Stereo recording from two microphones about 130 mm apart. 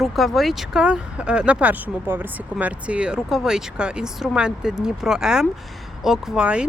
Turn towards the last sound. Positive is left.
turn(degrees=-5)  # may be behind; listen again after turning